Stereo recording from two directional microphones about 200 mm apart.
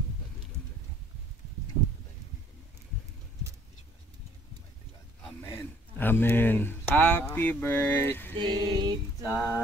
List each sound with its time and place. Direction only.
5.4 s speech: 10° left (ahead or behind)
8.4 s a sound: 20° right (ahead or behind)
9.3 s speech: 15° left (ahead or behind)